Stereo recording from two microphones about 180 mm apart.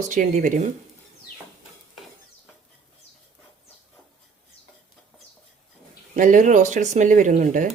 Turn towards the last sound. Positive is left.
turn(degrees=-45)  # may be behind; listen again after turning